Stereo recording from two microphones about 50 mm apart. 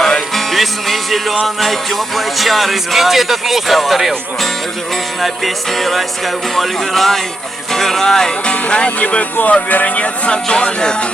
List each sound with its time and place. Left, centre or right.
0.0 s music: centre
1.6 s speech: centre
5.2 s speech: centre